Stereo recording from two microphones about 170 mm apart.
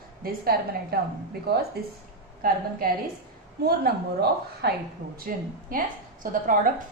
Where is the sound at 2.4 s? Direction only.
60° right (ahead or behind).